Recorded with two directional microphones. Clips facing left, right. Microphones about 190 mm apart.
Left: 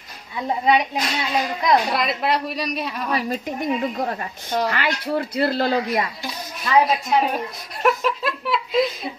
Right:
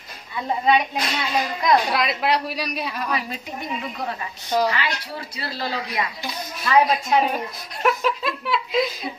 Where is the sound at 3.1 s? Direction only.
45° left (ahead or behind).